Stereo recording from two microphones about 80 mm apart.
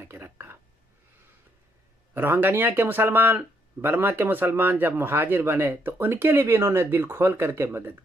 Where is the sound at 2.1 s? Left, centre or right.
Right.